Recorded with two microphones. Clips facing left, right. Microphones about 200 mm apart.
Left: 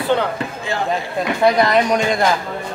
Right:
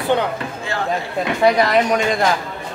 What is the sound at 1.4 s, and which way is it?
Speech, 5° right (ahead or behind).